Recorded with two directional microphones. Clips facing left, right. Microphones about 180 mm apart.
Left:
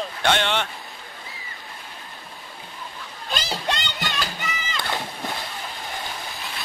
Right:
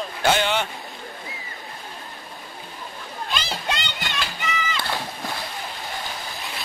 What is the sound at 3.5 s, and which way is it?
Music, centre (ahead or behind).